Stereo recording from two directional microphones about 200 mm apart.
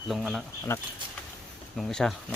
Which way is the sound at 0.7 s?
15° left (ahead or behind).